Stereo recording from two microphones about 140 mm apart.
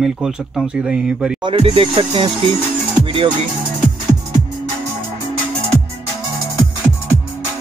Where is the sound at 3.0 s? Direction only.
40° right (ahead or behind).